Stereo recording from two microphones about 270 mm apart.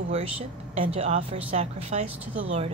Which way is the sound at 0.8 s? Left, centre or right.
Right.